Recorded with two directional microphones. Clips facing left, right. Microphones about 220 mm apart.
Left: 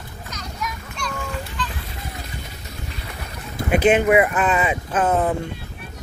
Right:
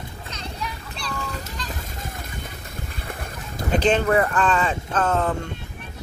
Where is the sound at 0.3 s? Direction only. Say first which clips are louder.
Left 2 dB; 30° right (ahead or behind).